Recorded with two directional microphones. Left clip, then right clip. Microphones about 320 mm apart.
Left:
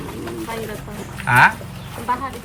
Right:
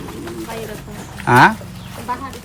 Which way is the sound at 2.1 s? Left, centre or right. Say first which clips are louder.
Left 3 dB; centre.